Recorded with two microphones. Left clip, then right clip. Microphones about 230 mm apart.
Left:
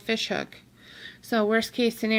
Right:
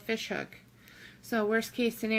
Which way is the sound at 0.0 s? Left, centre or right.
Left.